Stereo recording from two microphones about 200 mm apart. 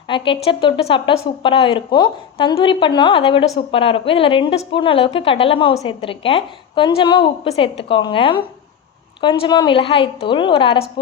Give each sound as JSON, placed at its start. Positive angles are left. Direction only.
{"t": 0.1, "sound": "speech", "side_deg": 25}